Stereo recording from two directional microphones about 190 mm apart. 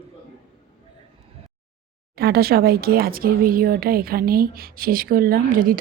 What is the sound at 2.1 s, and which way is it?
Speech, 55° right (ahead or behind).